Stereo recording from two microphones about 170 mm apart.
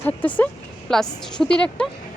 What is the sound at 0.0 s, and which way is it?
A woman's voice, 10° left (ahead or behind).